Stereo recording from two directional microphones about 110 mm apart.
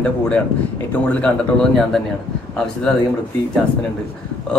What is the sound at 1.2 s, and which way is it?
Speech, 5° left (ahead or behind).